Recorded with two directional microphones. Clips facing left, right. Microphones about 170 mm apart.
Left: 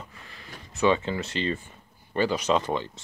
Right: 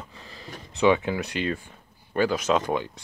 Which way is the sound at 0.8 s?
15° right (ahead or behind).